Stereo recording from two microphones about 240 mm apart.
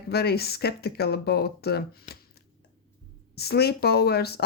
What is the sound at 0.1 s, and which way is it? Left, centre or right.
Speech, left.